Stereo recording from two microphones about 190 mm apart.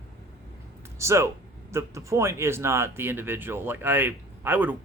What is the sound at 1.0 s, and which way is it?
Speech, 15° right (ahead or behind).